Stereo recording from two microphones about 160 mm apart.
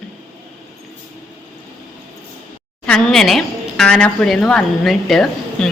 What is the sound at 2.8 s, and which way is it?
A woman's voice, 5° left (ahead or behind).